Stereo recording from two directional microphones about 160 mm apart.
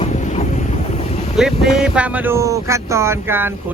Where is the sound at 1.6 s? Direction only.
5° right (ahead or behind).